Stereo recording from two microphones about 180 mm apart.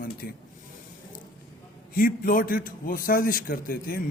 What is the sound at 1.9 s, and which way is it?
A man's voice, 50° left (ahead or behind).